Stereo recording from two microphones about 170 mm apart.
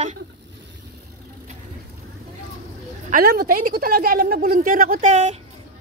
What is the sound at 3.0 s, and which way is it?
Speech, 55° right (ahead or behind).